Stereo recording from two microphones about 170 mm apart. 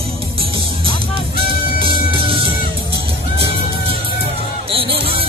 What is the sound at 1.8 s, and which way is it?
Music, 30° right (ahead or behind).